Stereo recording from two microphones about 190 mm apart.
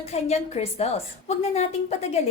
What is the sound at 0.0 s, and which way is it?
A woman's voice, 35° left (ahead or behind).